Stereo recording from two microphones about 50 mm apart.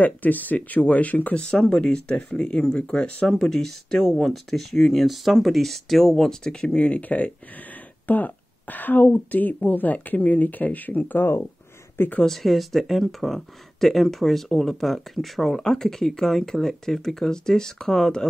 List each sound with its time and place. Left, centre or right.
0.0 s speech: left
1.3 s speech: centre
6.4 s speech: centre; by 11.0 s left
11.1 s speech: left
12.3 s speech: centre